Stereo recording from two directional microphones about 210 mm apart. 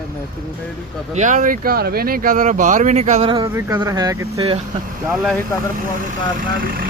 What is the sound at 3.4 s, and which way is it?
Speech, 15° right (ahead or behind).